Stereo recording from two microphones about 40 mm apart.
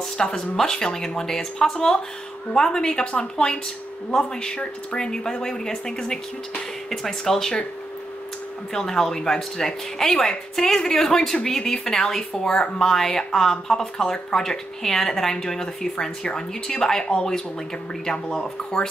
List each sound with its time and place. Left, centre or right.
0.2 s a woman's voice: centre
8.7 s speech: centre